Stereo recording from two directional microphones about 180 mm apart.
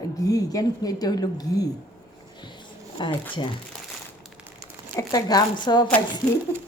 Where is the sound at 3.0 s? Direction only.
25° left (ahead or behind).